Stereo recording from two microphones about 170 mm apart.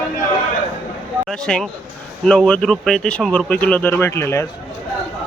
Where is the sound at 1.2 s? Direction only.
5° left (ahead or behind).